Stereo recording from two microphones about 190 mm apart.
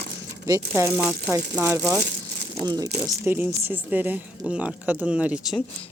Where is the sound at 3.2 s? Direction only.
10° right (ahead or behind).